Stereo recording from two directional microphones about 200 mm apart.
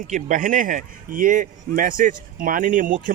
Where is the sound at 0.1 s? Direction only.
40° right (ahead or behind).